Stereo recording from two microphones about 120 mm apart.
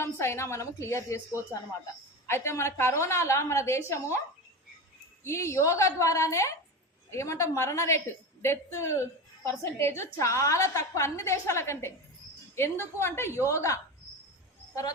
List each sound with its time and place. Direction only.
0.0 s a woman's voice: 20° left (ahead or behind)
2.2 s a woman's voice: 20° left (ahead or behind)
5.2 s a woman's voice: 25° left (ahead or behind)